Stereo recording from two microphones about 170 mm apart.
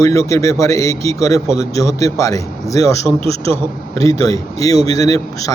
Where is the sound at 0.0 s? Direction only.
15° left (ahead or behind).